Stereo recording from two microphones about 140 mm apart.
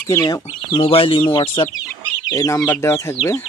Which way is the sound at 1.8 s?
25° left (ahead or behind).